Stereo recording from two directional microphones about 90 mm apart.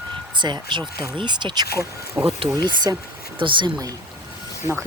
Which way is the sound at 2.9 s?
45° right (ahead or behind).